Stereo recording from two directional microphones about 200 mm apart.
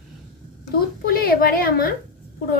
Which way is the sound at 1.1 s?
50° left (ahead or behind).